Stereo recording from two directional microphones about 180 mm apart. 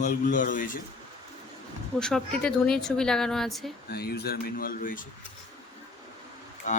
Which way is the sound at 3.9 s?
60° left (ahead or behind).